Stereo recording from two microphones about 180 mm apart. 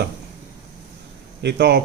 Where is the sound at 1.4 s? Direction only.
70° right (ahead or behind).